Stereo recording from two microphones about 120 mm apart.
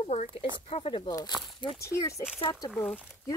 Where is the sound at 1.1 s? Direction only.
30° left (ahead or behind).